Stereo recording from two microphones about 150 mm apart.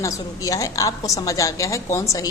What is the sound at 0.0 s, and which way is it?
A woman's voice, 20° left (ahead or behind).